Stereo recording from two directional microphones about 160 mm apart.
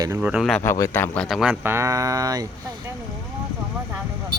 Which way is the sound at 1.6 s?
15° right (ahead or behind).